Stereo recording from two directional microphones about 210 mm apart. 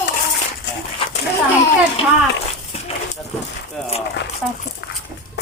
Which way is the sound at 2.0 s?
25° left (ahead or behind).